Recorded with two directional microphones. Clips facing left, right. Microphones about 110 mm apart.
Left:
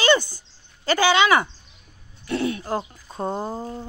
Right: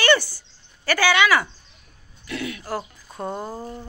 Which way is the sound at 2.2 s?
35° left (ahead or behind).